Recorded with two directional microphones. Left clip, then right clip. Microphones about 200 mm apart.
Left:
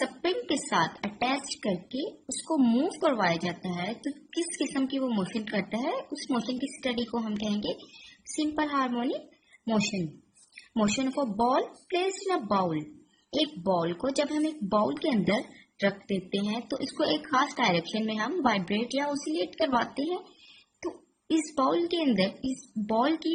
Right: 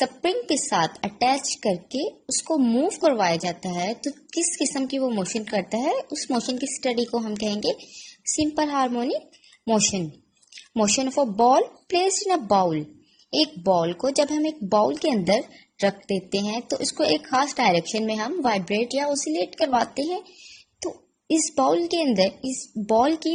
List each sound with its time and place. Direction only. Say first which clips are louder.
0.2 s a woman's voice: right 5 dB; 30° right (ahead or behind)
5.5 s a woman's voice: right 7 dB; 30° right (ahead or behind)
10.8 s a woman's voice: right 7 dB; 30° right (ahead or behind)
21.5 s a woman's voice: right 6 dB; 25° right (ahead or behind)